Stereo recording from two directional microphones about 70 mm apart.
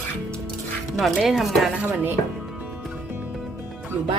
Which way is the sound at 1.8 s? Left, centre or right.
Right.